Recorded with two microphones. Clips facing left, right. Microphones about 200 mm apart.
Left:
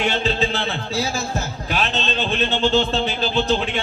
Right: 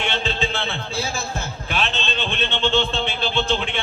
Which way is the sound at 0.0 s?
40° left (ahead or behind).